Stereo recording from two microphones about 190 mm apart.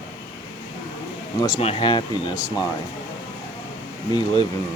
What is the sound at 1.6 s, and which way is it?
Speech, 30° left (ahead or behind).